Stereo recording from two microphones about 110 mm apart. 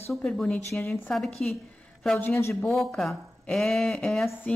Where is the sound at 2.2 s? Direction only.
20° left (ahead or behind).